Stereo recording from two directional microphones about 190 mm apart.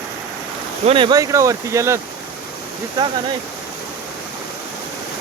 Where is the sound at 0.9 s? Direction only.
25° right (ahead or behind).